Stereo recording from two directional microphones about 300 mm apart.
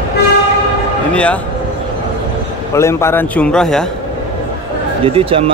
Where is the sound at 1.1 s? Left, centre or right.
Centre.